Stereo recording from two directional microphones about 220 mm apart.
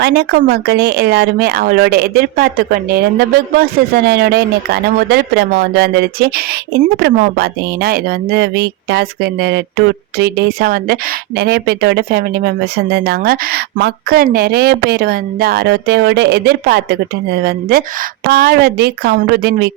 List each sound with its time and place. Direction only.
0.0 s speech: 50° right (ahead or behind)